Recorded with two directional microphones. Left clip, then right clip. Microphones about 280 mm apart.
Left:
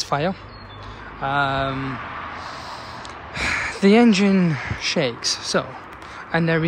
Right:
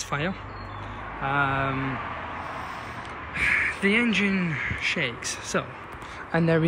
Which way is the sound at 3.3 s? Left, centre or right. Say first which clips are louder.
Even; centre.